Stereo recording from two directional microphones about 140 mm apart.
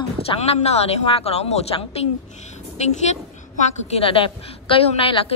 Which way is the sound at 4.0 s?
40° left (ahead or behind).